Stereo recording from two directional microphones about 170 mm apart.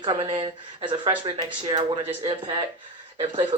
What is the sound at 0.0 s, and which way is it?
Speech, 30° right (ahead or behind).